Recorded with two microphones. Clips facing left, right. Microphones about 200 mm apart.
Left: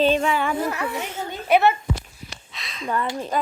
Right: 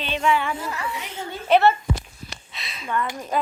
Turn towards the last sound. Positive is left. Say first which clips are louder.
# left 2 dB
turn(degrees=35)  # may be behind; listen again after turning